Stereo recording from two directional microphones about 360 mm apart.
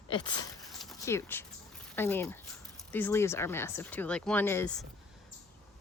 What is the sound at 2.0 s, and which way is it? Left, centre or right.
Speech, centre.